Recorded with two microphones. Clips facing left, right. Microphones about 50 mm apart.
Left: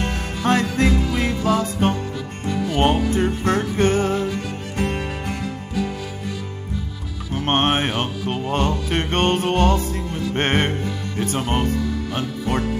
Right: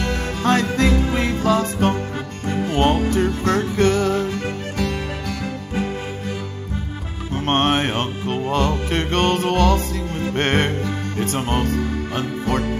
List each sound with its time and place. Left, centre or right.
0.4 s music: left
0.7 s music: right
3.2 s music: left
5.4 s music: right
7.4 s music: left
9.3 s music: right
10.3 s music: left
10.8 s music: right